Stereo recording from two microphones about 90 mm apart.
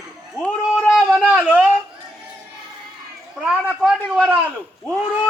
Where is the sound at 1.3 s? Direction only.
15° right (ahead or behind).